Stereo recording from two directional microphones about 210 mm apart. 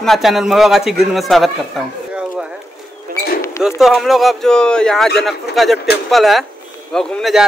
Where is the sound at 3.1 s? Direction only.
45° right (ahead or behind).